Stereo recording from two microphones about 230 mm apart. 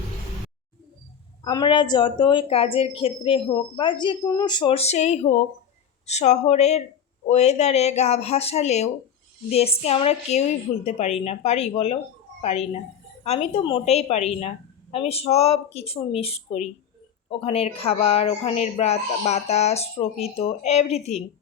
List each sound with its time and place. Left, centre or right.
1.5 s a woman's voice: centre